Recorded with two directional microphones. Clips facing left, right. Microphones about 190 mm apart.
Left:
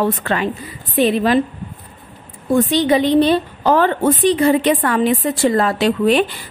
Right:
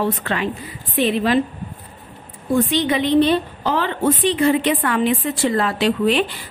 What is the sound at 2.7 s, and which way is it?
A woman's voice, 35° left (ahead or behind).